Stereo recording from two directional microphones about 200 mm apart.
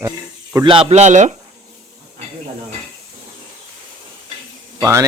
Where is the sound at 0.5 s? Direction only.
25° right (ahead or behind).